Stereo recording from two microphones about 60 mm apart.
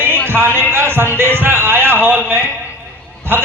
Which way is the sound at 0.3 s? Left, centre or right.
Right.